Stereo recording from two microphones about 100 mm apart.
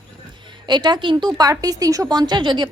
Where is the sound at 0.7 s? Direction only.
45° right (ahead or behind).